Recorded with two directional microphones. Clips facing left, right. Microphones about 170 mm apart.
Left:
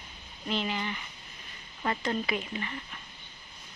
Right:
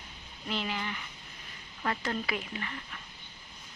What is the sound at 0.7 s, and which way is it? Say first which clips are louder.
Speech: left 2 dB; 15° left (ahead or behind).